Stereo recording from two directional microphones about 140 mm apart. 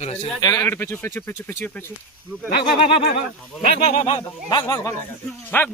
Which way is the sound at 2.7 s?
40° left (ahead or behind).